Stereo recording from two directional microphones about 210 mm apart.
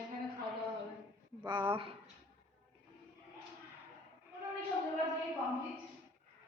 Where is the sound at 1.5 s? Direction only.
25° right (ahead or behind).